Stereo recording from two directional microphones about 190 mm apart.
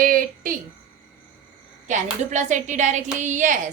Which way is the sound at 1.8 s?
40° right (ahead or behind).